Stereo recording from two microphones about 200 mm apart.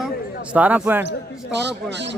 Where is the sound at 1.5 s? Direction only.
60° right (ahead or behind).